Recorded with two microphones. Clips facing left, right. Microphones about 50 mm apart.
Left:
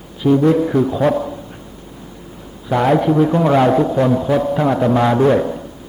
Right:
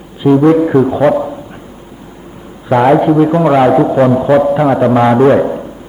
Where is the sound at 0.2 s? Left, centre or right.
Centre.